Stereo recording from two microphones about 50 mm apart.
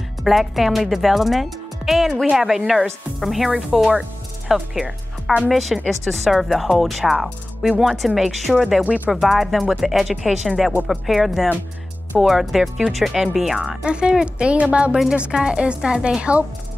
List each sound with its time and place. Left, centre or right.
0.2 s speech: centre
5.5 s speech: centre
8.8 s speech: right
9.1 s speech: centre
13.8 s a woman's voice: centre